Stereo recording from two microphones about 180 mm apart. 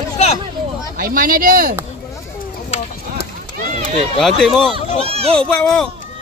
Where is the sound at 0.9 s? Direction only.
50° right (ahead or behind).